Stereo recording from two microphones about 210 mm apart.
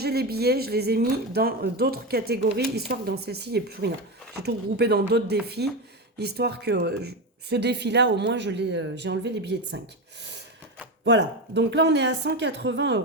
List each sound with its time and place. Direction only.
0.0 s speech: 50° right (ahead or behind)
11.0 s speech: 55° right (ahead or behind)